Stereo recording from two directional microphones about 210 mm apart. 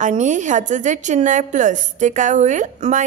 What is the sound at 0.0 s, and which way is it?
A woman's voice, 35° right (ahead or behind).